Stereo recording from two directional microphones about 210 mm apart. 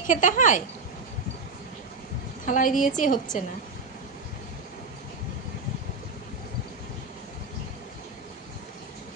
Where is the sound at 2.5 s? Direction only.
40° left (ahead or behind).